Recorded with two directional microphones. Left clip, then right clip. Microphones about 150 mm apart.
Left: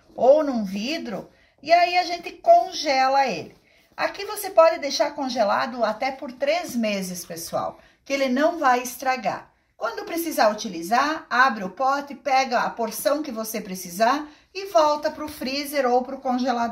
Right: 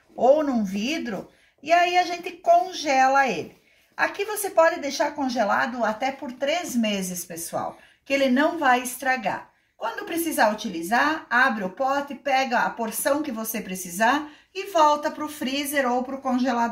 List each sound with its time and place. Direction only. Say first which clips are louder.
0.1 s a woman's voice: left 2 dB; centre (ahead or behind)